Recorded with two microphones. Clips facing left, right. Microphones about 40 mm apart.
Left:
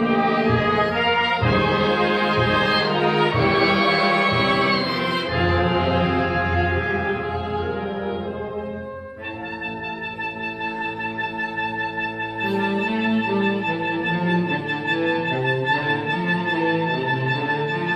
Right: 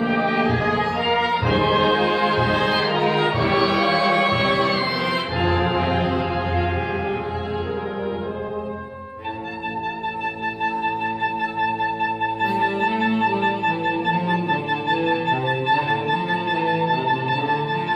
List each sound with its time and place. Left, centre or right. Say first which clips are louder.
0.0 s music: left 1 dB; centre
0.7 s music: left 1 dB; centre
12.7 s music: right 1 dB; centre